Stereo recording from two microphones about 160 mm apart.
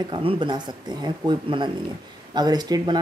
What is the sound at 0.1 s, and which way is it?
Speech, 35° right (ahead or behind).